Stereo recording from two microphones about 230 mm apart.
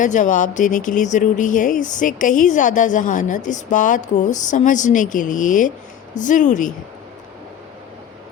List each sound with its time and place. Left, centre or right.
0.0 s speech: left